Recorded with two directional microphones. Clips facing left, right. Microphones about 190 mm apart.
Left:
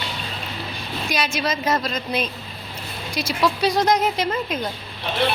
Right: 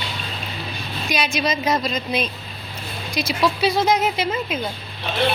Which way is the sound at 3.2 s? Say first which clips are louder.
Even; 10° right (ahead or behind).